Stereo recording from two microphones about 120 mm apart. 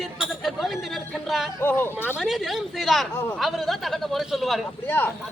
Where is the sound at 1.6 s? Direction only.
20° left (ahead or behind).